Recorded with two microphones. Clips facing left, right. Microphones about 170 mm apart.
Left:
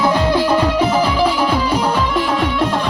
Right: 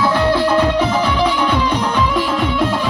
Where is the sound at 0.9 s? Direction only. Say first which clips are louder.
Left 1 dB; 10° left (ahead or behind).